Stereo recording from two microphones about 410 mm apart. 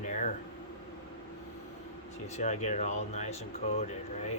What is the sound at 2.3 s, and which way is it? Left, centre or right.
Speech, centre.